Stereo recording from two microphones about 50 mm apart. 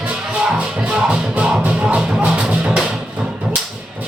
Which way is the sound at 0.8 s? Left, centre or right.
Right.